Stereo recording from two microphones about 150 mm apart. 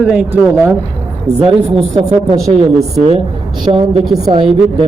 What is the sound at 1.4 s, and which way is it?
Speech, 35° right (ahead or behind).